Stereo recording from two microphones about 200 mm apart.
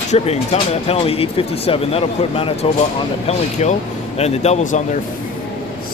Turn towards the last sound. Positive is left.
turn(degrees=35)  # may be behind; listen again after turning